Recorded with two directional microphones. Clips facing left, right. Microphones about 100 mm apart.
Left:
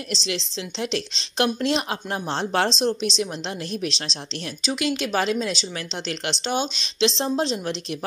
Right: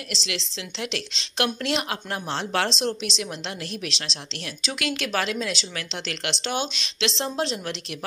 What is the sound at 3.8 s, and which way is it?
Speech, 30° left (ahead or behind).